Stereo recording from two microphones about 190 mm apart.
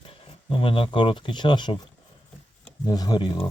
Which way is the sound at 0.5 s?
30° left (ahead or behind).